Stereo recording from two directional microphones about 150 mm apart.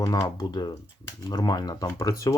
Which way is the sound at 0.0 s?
25° left (ahead or behind).